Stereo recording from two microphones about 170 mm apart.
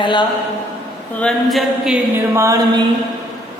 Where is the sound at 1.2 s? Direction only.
Centre (ahead or behind).